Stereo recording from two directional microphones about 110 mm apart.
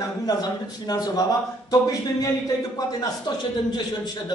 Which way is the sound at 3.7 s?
40° left (ahead or behind).